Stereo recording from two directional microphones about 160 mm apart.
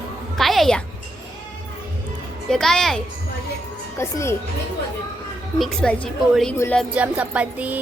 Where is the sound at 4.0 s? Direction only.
15° left (ahead or behind).